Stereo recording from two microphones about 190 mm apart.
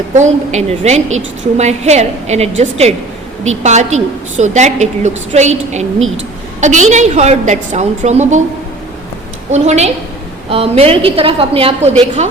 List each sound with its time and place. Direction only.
0.1 s a woman's voice: 40° right (ahead or behind)
9.5 s a woman's voice: 35° right (ahead or behind)